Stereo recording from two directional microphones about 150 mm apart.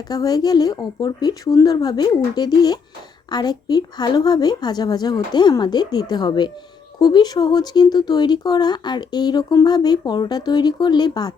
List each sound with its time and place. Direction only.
0.1 s speech: 25° left (ahead or behind)